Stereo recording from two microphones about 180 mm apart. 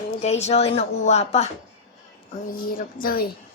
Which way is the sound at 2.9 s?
55° left (ahead or behind).